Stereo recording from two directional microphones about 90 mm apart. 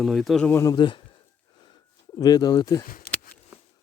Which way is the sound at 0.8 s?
60° left (ahead or behind).